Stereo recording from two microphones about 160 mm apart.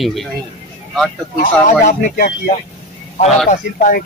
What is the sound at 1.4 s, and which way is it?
Speech, 50° left (ahead or behind).